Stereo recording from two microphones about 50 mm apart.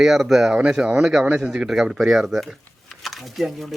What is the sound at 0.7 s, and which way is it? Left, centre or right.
Speech, centre.